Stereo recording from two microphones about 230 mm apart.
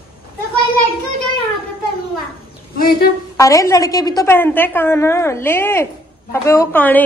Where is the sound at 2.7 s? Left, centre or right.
Left.